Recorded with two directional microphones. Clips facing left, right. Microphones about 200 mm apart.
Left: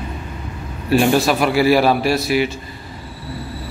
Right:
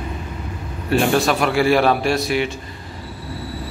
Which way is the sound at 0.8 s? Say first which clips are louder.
Left 2 dB; 5° left (ahead or behind).